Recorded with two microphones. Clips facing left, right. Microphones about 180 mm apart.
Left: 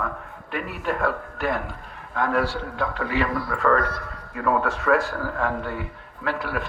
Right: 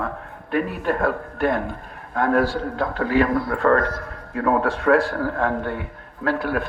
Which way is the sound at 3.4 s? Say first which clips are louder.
Right 3 dB; 30° right (ahead or behind).